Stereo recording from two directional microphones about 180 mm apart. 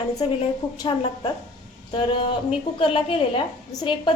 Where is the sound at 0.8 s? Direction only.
25° left (ahead or behind).